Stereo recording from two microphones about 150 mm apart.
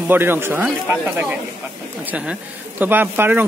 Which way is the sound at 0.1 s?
15° right (ahead or behind).